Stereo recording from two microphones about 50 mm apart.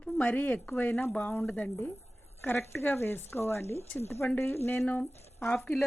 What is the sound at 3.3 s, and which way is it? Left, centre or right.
Speech, left.